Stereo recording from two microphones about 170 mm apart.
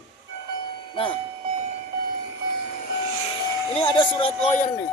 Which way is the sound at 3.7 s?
30° left (ahead or behind).